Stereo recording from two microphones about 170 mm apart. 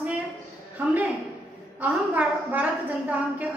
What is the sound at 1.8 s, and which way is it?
A woman's voice, 10° right (ahead or behind).